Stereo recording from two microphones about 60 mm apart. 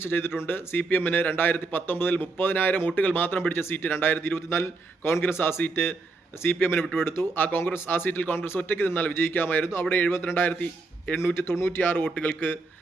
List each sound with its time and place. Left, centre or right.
0.0 s speech: left
11.2 s speech: left